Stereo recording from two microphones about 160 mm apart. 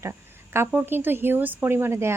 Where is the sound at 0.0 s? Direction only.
15° right (ahead or behind).